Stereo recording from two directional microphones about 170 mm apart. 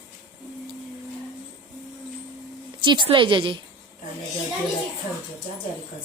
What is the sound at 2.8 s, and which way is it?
Speech, 25° right (ahead or behind).